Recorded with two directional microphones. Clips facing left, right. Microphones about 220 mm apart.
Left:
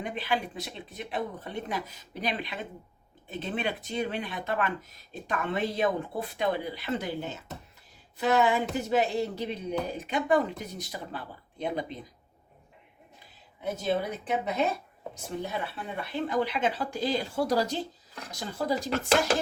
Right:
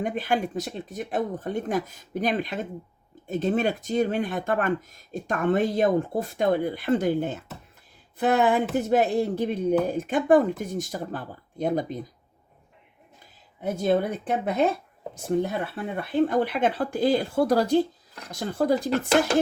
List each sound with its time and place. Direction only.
0.0 s speech: 45° right (ahead or behind)
13.8 s speech: 50° right (ahead or behind)